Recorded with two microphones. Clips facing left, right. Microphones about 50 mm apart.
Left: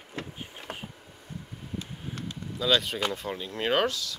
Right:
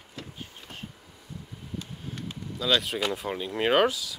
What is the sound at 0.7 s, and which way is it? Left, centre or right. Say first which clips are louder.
Vehicle: left 7 dB; left.